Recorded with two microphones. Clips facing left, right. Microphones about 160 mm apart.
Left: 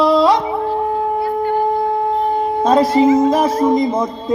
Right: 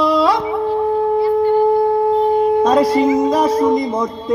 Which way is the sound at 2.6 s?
25° left (ahead or behind).